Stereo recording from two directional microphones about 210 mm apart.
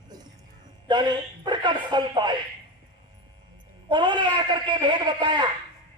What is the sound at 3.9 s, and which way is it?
A man's voice, 20° right (ahead or behind).